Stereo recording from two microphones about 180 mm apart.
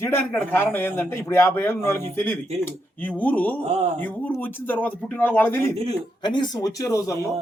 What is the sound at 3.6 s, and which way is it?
Speech, 40° right (ahead or behind).